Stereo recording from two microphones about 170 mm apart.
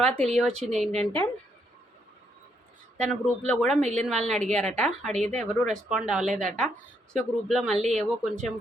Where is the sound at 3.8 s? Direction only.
40° right (ahead or behind).